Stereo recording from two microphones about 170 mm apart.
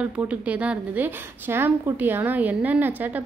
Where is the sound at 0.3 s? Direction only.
10° right (ahead or behind).